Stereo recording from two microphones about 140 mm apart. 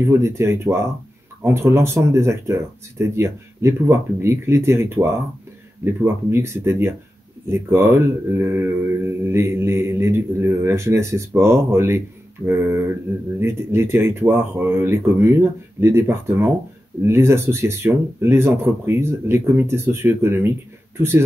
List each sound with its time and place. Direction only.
0.0 s mantra: 20° right (ahead or behind)
12.4 s speech: 15° right (ahead or behind)